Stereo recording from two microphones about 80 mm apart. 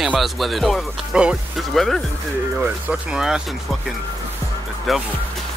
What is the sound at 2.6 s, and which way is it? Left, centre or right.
Speech, centre.